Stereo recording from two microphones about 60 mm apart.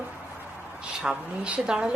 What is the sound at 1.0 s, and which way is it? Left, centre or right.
Speech, centre.